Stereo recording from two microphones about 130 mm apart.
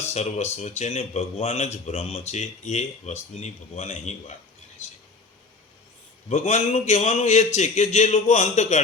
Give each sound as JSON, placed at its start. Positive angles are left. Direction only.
{"t": 0.0, "sound": "speech", "side_deg": 60}
{"t": 6.2, "sound": "speech", "side_deg": 60}